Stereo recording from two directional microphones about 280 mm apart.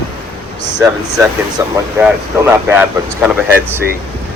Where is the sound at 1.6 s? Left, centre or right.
Centre.